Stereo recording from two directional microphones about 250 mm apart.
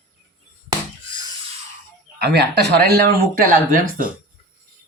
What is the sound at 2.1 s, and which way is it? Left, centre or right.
Speech, right.